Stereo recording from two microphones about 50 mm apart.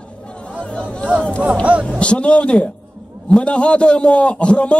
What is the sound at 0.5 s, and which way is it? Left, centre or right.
Chatter, left.